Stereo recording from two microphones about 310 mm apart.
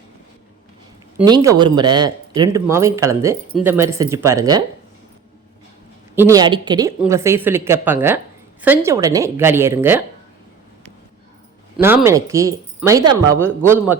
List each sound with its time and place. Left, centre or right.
1.2 s speech: centre
6.1 s speech: centre
11.8 s speech: centre